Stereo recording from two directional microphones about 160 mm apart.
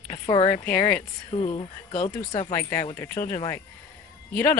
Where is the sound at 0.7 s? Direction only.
10° left (ahead or behind).